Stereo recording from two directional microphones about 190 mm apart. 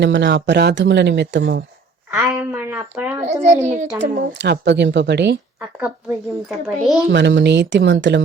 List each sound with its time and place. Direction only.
0.0 s speech: 70° right (ahead or behind)
2.0 s speech: 15° right (ahead or behind)
3.2 s a child's voice: 35° right (ahead or behind)
3.9 s speech: 65° right (ahead or behind)
6.5 s a child's voice: centre (ahead or behind)
7.1 s speech: 65° right (ahead or behind)